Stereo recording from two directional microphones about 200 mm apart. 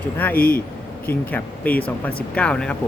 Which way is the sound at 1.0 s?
10° left (ahead or behind).